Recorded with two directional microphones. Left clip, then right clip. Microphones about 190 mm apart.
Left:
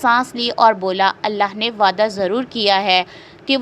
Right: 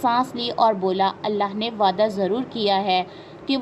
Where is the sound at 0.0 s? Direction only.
40° left (ahead or behind).